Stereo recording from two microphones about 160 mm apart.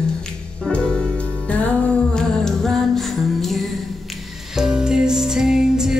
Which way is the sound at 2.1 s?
5° left (ahead or behind).